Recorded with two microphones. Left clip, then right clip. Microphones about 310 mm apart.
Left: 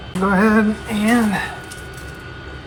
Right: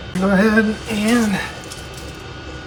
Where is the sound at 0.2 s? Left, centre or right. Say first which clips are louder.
Even; centre.